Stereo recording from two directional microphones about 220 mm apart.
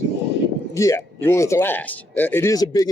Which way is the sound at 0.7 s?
15° left (ahead or behind).